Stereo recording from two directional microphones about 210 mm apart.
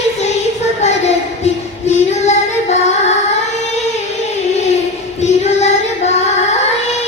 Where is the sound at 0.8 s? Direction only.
30° left (ahead or behind).